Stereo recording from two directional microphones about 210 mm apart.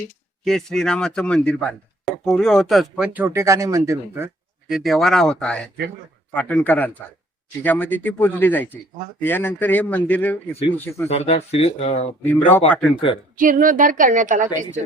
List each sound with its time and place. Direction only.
0.4 s speech: centre (ahead or behind)
4.7 s speech: centre (ahead or behind)
11.1 s speech: 30° left (ahead or behind)
12.5 s speech: 10° left (ahead or behind)
13.3 s a woman's voice: 40° right (ahead or behind)